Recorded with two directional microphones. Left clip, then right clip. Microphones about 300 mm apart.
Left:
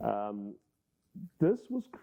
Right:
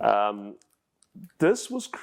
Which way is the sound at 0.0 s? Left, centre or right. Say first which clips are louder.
Right 11 dB; centre.